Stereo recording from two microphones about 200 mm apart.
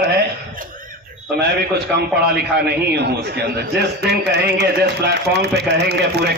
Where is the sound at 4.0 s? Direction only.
55° right (ahead or behind).